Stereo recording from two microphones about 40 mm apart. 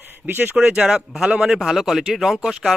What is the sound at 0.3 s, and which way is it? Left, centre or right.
Speech, right.